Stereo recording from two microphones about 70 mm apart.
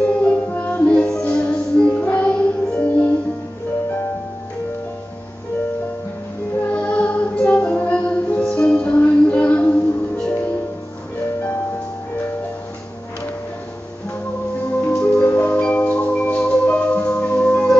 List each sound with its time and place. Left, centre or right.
0.0 s music: centre
6.7 s music: centre
14.9 s music: centre